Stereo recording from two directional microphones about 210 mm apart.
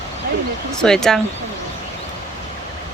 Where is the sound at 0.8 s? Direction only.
Centre (ahead or behind).